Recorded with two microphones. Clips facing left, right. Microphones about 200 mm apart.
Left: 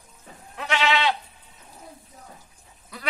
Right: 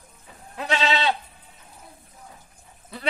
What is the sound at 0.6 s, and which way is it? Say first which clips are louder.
Goat: even; 30° right (ahead or behind).